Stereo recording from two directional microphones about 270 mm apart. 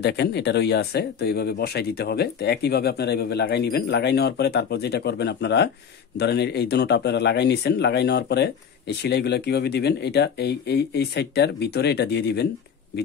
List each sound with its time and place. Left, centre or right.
0.0 s speech: left